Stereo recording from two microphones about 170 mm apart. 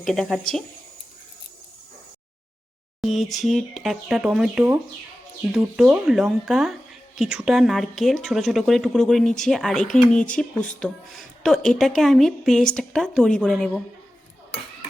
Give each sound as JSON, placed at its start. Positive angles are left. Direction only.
{"t": 0.0, "sound": "speech", "side_deg": 0}
{"t": 3.0, "sound": "speech", "side_deg": 0}